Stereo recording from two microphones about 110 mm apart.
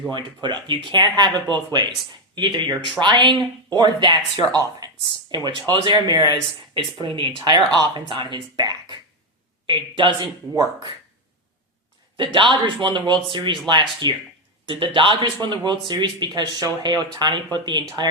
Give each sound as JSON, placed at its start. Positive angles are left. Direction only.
{"t": 0.4, "sound": "speech", "side_deg": -45}
{"t": 12.1, "sound": "speech", "side_deg": -50}